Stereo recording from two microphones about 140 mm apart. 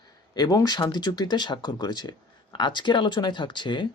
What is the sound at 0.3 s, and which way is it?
Speech, 30° left (ahead or behind).